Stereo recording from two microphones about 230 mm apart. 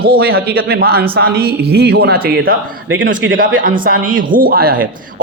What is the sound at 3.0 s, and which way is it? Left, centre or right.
Speech, right.